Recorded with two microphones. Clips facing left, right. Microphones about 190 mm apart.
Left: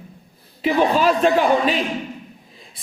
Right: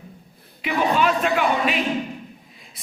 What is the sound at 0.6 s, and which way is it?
A woman's voice, 35° left (ahead or behind).